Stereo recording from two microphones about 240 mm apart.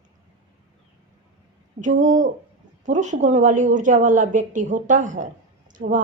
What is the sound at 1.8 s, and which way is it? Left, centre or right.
Speech, right.